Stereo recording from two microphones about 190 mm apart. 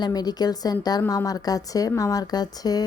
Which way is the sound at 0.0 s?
20° left (ahead or behind).